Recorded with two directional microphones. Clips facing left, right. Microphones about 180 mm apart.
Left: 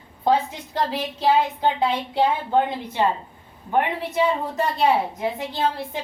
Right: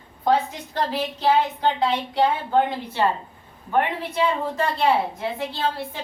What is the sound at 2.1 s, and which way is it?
A woman's voice, 20° left (ahead or behind).